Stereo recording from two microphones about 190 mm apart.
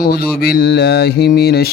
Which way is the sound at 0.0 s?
55° left (ahead or behind).